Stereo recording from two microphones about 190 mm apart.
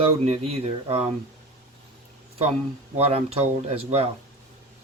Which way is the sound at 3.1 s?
30° right (ahead or behind).